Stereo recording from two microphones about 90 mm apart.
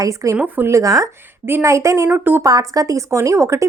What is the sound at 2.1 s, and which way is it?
Speech, 20° right (ahead or behind).